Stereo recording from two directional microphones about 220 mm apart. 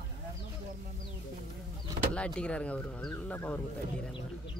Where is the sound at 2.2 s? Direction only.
5° left (ahead or behind).